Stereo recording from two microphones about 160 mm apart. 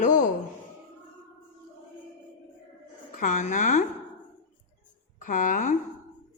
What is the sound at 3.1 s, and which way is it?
Speech, 55° left (ahead or behind).